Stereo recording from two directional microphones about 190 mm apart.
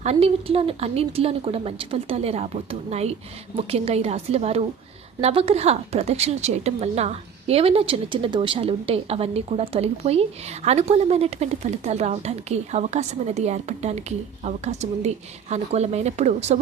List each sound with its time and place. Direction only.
0.0 s a woman's voice: 30° right (ahead or behind)